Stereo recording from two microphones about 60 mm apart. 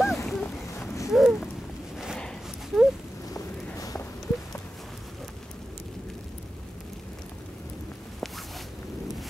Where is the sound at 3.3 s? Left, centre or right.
Left.